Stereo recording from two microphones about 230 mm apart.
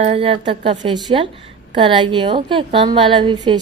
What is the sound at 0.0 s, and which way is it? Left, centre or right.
A woman's voice, right.